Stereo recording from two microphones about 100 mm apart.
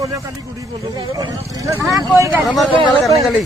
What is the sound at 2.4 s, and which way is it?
Speech, centre (ahead or behind).